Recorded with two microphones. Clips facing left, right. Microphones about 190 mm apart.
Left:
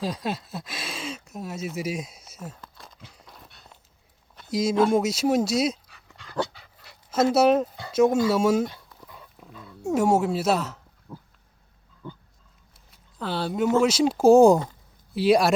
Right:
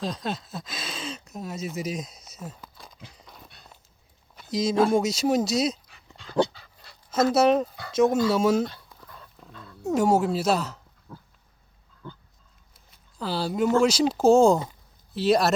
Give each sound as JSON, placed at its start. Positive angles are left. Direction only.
{"t": 0.0, "sound": "speech", "side_deg": 5}
{"t": 3.2, "sound": "horse", "side_deg": 0}
{"t": 4.5, "sound": "speech", "side_deg": 5}
{"t": 5.9, "sound": "dog", "side_deg": -20}
{"t": 7.3, "sound": "speech", "side_deg": 5}
{"t": 12.0, "sound": "dog", "side_deg": 15}
{"t": 13.1, "sound": "speech", "side_deg": 0}